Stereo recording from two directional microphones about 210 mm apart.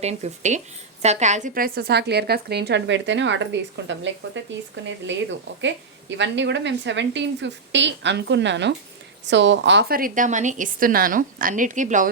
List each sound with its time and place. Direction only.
0.0 s a woman's voice: 30° right (ahead or behind)